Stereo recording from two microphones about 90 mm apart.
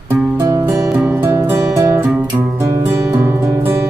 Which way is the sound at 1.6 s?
35° right (ahead or behind).